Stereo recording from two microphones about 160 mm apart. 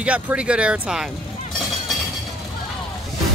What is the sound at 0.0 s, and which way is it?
Speech, 5° right (ahead or behind).